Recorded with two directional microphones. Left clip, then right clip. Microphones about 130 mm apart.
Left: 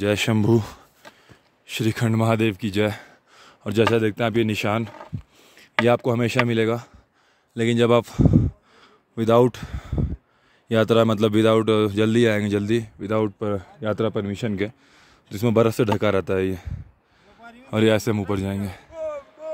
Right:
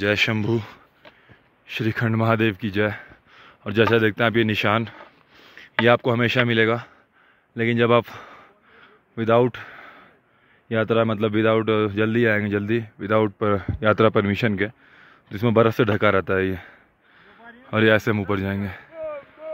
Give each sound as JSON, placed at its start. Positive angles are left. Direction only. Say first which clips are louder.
{"t": 0.1, "sound": "speech", "louder": "right 2 dB", "side_deg": 40}
{"t": 0.4, "sound": "speech", "louder": "left 4 dB", "side_deg": 65}
{"t": 1.7, "sound": "speech", "louder": "even", "side_deg": 30}
{"t": 3.0, "sound": "a sound", "louder": "right 2 dB", "side_deg": 45}
{"t": 3.8, "sound": "speech", "louder": "right 2 dB", "side_deg": 5}
{"t": 7.5, "sound": "speech", "louder": "even", "side_deg": 25}
{"t": 8.7, "sound": "a sound", "louder": "right 2 dB", "side_deg": 30}
{"t": 10.7, "sound": "speech", "louder": "left 2 dB", "side_deg": 35}
{"t": 13.0, "sound": "speech", "louder": "right 5 dB", "side_deg": 10}
{"t": 13.4, "sound": "speech", "louder": "right 5 dB", "side_deg": -5}
{"t": 14.5, "sound": "speech", "louder": "right 2 dB", "side_deg": 15}
{"t": 18.9, "sound": "a sound", "louder": "left 2 dB", "side_deg": 35}